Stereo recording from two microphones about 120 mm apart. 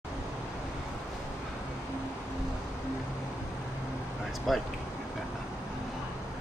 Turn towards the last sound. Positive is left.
turn(degrees=0)  # may be behind; listen again after turning